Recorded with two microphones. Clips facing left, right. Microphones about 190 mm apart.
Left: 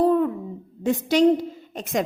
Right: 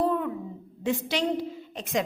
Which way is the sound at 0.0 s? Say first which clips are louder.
Left 7 dB; 35° left (ahead or behind).